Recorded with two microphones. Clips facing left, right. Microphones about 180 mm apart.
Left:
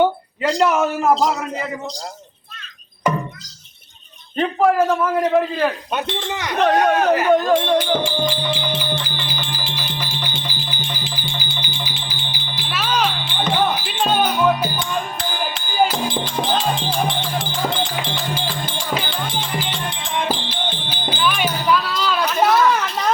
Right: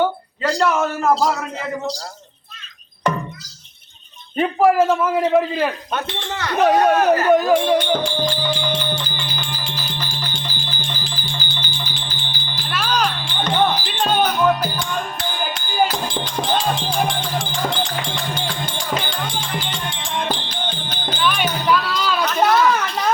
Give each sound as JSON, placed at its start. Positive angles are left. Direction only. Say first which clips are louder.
{"t": 0.6, "sound": "speech", "louder": "left 2 dB", "side_deg": 15}
{"t": 4.4, "sound": "a man's voice", "louder": "right 1 dB", "side_deg": -5}
{"t": 5.9, "sound": "speech", "louder": "left 2 dB", "side_deg": 15}
{"t": 6.6, "sound": "a man's voice", "louder": "right 1 dB", "side_deg": -5}
{"t": 7.8, "sound": "music", "louder": "even", "side_deg": 5}